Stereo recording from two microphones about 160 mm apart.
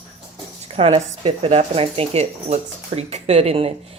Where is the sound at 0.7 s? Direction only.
40° right (ahead or behind).